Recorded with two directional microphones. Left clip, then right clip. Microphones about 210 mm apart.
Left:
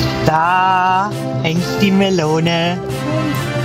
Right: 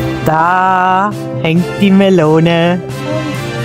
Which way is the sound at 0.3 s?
55° right (ahead or behind).